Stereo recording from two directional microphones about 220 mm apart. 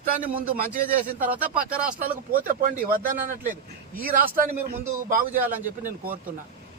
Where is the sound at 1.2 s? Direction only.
5° right (ahead or behind).